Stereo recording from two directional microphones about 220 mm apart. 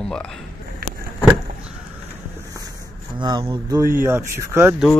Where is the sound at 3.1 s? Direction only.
20° right (ahead or behind).